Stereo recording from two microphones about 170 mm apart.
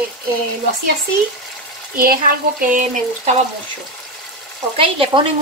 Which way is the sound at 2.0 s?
60° right (ahead or behind).